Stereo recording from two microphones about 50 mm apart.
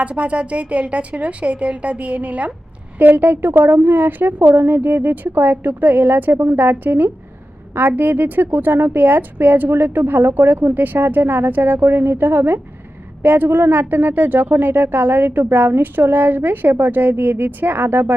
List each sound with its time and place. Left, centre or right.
0.0 s a woman's voice: right